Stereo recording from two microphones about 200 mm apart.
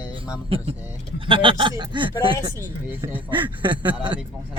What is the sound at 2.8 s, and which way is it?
Speech, 10° right (ahead or behind).